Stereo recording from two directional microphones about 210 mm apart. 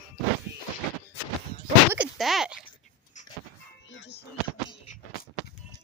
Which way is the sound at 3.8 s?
60° left (ahead or behind).